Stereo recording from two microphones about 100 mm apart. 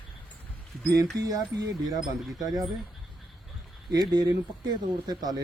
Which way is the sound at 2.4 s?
35° right (ahead or behind).